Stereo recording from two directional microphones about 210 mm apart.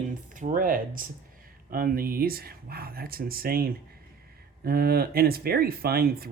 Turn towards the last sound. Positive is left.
turn(degrees=-45)  # may be behind; listen again after turning